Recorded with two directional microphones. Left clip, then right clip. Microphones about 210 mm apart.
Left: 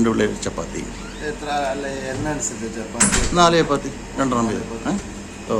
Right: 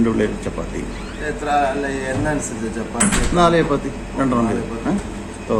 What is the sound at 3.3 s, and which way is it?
A man's voice, 15° left (ahead or behind).